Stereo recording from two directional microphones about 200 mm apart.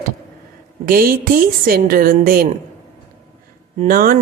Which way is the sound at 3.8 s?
45° right (ahead or behind).